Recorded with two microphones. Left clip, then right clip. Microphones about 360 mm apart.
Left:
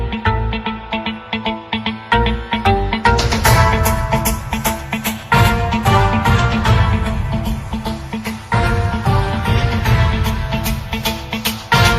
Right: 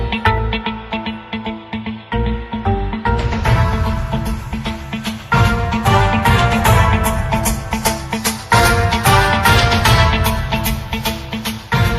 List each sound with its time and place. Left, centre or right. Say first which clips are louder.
0.1 s music: right 3 dB; centre; by 4.2 s left
4.6 s music: left 4 dB; centre; by 7.1 s right
7.9 s music: right 7 dB; right; by 11.9 s centre